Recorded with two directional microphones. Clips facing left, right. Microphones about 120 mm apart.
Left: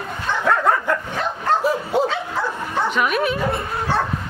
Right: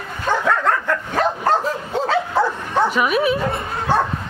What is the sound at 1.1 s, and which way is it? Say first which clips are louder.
Dog: right 8 dB; 45° right (ahead or behind).